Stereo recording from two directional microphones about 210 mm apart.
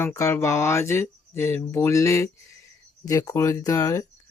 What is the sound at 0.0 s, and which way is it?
Speech, 15° left (ahead or behind).